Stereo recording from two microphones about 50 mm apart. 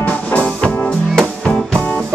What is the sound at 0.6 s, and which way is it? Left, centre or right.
Music, centre.